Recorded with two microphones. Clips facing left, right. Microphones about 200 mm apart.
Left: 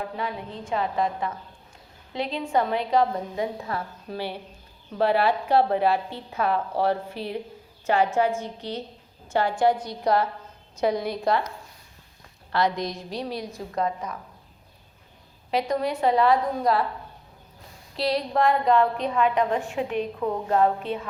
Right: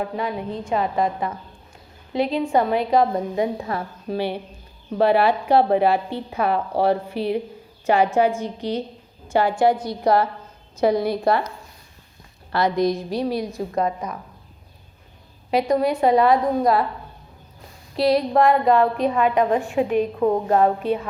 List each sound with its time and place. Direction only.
0.2 s a woman's voice: 15° right (ahead or behind)
7.1 s a woman's voice: 65° right (ahead or behind)
7.9 s a woman's voice: 15° right (ahead or behind)
11.0 s a woman's voice: 5° right (ahead or behind)
12.5 s a woman's voice: 5° right (ahead or behind)
15.5 s a woman's voice: 10° right (ahead or behind)
17.9 s a woman's voice: 10° right (ahead or behind)
19.6 s a woman's voice: 50° right (ahead or behind)
20.1 s a woman's voice: 40° right (ahead or behind)
20.5 s a woman's voice: 55° right (ahead or behind)